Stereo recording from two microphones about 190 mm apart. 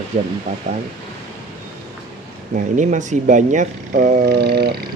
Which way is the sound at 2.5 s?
40° right (ahead or behind).